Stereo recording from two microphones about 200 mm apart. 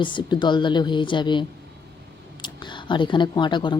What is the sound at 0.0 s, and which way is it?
Speech, 25° left (ahead or behind).